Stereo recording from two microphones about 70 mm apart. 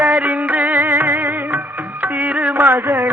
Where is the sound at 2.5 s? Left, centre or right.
Right.